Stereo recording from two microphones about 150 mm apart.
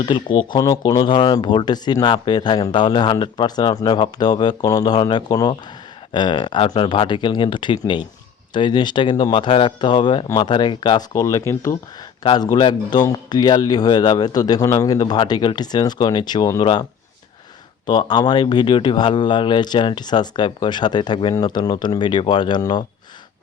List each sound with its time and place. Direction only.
0.0 s speech: 30° left (ahead or behind)
12.2 s speech: 30° left (ahead or behind)
17.8 s speech: 30° left (ahead or behind)